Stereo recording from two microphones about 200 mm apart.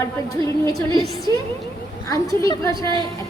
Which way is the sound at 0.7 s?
15° left (ahead or behind).